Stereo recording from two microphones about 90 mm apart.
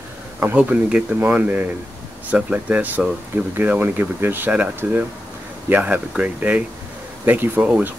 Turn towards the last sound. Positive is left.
turn(degrees=-20)  # may be behind; listen again after turning